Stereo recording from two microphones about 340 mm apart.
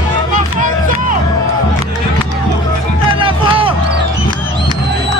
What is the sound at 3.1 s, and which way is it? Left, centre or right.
Music, centre.